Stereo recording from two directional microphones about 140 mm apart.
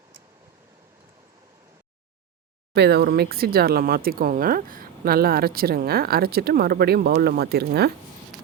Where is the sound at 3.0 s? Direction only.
90° right.